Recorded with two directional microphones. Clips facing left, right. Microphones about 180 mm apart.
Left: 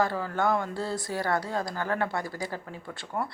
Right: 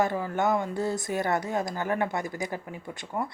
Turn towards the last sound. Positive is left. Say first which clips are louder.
# right 1 dB
turn(degrees=-5)  # may be behind; listen again after turning